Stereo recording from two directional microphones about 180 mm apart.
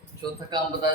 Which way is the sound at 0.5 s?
25° right (ahead or behind).